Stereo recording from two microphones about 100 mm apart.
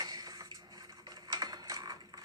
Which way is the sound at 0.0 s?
40° right (ahead or behind).